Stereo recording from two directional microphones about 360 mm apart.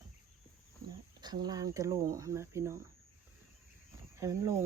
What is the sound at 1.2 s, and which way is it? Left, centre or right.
Speech, centre.